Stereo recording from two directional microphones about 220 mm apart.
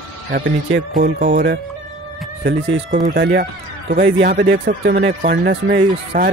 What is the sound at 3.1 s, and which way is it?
Speech, 45° right (ahead or behind).